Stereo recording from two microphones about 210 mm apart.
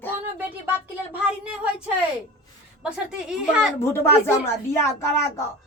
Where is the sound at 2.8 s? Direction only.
5° right (ahead or behind).